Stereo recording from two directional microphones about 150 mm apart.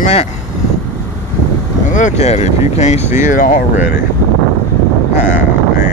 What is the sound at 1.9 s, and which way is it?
Speech, 50° left (ahead or behind).